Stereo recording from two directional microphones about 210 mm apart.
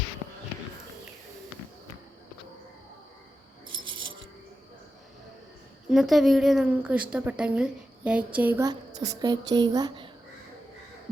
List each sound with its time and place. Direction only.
5.9 s a woman's voice: centre (ahead or behind); by 10.1 s 20° right (ahead or behind)